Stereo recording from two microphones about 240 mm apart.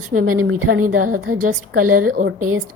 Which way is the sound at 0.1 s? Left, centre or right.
Right.